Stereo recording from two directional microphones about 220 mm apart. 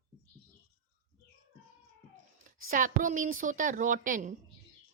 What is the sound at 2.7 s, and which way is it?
A woman's voice, 35° right (ahead or behind).